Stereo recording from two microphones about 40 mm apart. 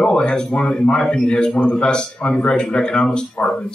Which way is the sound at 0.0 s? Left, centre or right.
Left.